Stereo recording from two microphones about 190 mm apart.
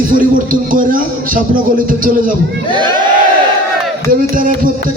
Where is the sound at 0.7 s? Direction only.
45° right (ahead or behind).